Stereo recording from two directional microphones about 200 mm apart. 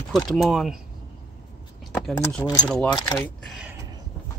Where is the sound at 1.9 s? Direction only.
5° left (ahead or behind).